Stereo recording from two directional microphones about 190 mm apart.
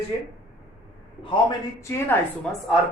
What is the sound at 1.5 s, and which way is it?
Speech, 15° left (ahead or behind).